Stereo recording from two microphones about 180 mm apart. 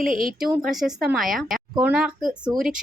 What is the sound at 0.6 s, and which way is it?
Speech, centre (ahead or behind).